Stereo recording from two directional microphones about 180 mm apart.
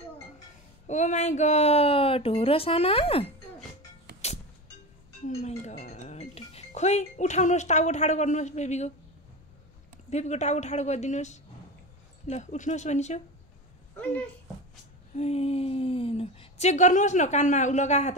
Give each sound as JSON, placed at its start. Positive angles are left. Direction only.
{"t": 0.8, "sound": "speech", "side_deg": 40}
{"t": 5.2, "sound": "speech", "side_deg": 40}
{"t": 10.0, "sound": "speech", "side_deg": 40}
{"t": 15.1, "sound": "speech", "side_deg": 35}